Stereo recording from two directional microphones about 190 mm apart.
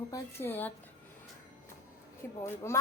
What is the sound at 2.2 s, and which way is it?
Speech, 10° left (ahead or behind).